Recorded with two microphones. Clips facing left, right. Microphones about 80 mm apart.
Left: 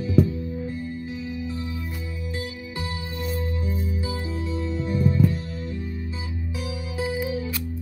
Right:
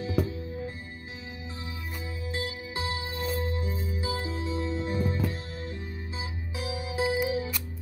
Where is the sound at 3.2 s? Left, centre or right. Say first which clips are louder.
Left 2 dB; right.